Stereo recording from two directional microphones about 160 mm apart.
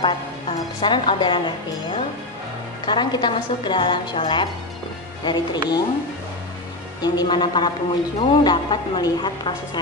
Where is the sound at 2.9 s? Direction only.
30° left (ahead or behind).